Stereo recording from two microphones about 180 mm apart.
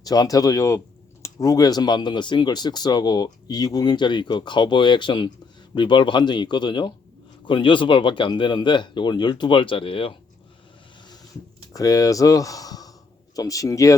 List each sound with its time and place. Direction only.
0.0 s speech: 20° left (ahead or behind)
11.7 s speech: 20° left (ahead or behind)